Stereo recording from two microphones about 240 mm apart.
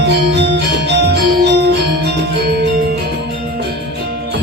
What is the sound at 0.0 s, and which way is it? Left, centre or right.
Music, right.